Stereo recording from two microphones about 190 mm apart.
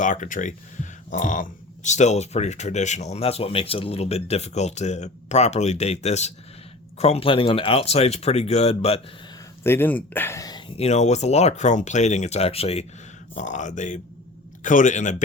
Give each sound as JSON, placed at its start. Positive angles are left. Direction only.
{"t": 0.0, "sound": "speech", "side_deg": 40}
{"t": 9.6, "sound": "speech", "side_deg": 10}
{"t": 10.8, "sound": "speech", "side_deg": 35}